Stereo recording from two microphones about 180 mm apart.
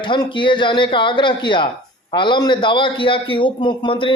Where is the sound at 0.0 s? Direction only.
25° left (ahead or behind).